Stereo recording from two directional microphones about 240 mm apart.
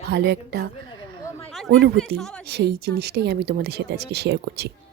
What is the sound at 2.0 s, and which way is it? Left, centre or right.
Speech, centre.